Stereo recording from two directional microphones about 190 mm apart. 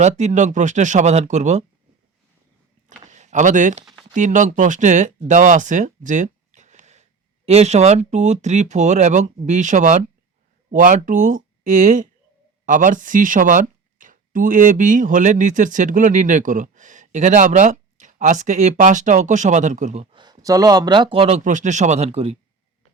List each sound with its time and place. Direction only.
0.0 s speech: 40° right (ahead or behind)
3.1 s speech: 40° right (ahead or behind)
20.1 s a man's voice: 20° right (ahead or behind)